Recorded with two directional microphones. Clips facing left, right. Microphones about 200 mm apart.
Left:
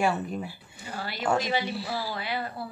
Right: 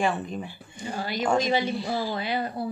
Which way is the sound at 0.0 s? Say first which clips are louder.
Even; 10° left (ahead or behind).